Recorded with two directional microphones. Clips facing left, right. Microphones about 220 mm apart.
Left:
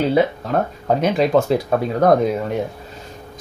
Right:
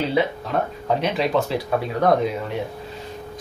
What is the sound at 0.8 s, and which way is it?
Speech, 45° left (ahead or behind).